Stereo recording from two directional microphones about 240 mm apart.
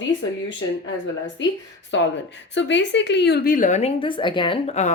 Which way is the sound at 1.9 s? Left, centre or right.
Left.